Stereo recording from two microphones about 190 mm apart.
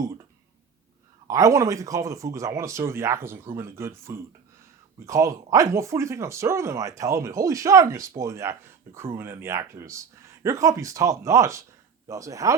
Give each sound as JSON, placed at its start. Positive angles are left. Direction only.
{"t": 1.3, "sound": "speech", "side_deg": -15}